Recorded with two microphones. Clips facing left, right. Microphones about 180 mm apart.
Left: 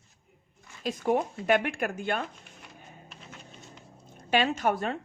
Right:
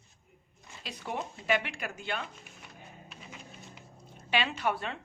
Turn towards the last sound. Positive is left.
turn(degrees=45)  # may be behind; listen again after turning